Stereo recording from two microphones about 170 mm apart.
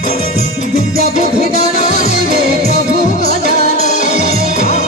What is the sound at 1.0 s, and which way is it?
Music, 40° left (ahead or behind).